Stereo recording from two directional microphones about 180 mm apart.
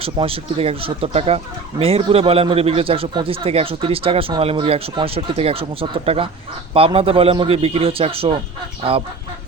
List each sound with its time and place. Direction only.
0.0 s speech: 30° right (ahead or behind)